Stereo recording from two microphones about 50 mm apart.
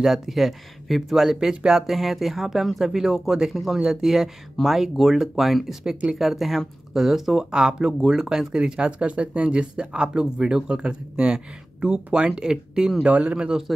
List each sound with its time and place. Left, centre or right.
0.0 s speech: centre
1.5 s speech: centre
1.8 s speech: centre; by 13.6 s right